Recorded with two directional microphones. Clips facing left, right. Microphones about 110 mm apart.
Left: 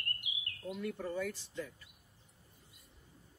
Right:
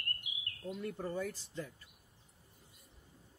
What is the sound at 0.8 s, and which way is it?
Speech, 35° right (ahead or behind).